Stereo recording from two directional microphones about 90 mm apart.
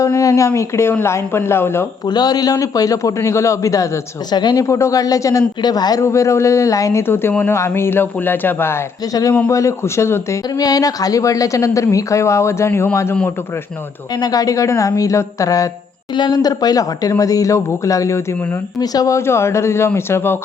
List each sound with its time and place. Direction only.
0.0 s speech: 35° left (ahead or behind)
2.0 s speech: 50° left (ahead or behind)
4.3 s speech: 50° left (ahead or behind)
4.6 s speech: 35° left (ahead or behind)
6.1 s speech: 35° left (ahead or behind)
7.1 s speech: 25° left (ahead or behind)
10.6 s speech: 45° left (ahead or behind)
14.2 s speech: 45° left (ahead or behind)
16.1 s speech: 55° left (ahead or behind); by 20.4 s 25° left (ahead or behind)